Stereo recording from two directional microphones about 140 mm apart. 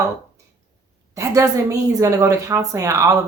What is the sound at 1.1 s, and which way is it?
A woman's voice, 20° right (ahead or behind).